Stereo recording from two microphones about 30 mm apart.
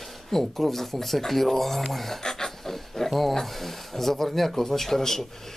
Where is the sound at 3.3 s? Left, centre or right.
Centre.